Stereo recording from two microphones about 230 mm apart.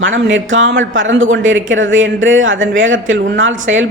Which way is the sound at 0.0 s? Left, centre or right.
Right.